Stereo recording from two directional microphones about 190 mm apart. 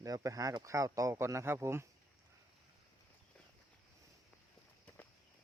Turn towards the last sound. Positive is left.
turn(degrees=10)  # may be behind; listen again after turning